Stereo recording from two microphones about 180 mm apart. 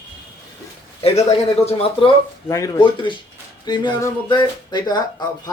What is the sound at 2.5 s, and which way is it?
Speech, 20° left (ahead or behind).